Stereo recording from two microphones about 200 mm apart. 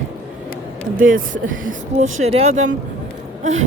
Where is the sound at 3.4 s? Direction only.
35° right (ahead or behind).